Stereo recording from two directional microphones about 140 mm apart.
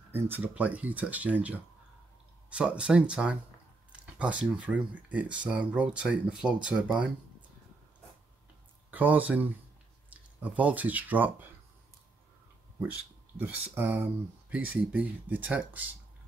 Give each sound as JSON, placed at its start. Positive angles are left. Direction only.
{"t": 0.1, "sound": "speech", "side_deg": -10}
{"t": 8.9, "sound": "speech", "side_deg": -10}
{"t": 12.7, "sound": "speech", "side_deg": -10}